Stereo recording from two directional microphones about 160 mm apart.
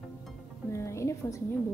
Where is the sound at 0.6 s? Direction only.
15° left (ahead or behind).